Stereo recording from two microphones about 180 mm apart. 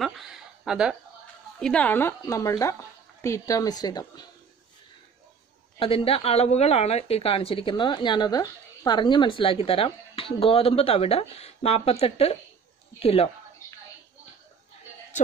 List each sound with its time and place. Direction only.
0.0 s a sound: centre (ahead or behind)
1.6 s a woman's voice: 5° left (ahead or behind)
5.8 s a woman's voice: 30° left (ahead or behind)